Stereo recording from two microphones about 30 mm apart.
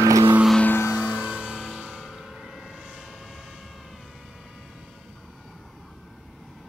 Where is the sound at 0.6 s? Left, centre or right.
Left.